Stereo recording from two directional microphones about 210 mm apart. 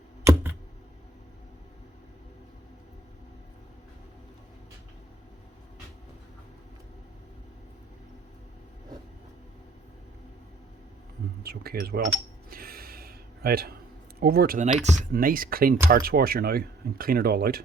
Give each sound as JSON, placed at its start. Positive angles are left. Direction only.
{"t": 11.4, "sound": "speech", "side_deg": -45}
{"t": 12.5, "sound": "a sound", "side_deg": -45}
{"t": 14.2, "sound": "speech", "side_deg": -45}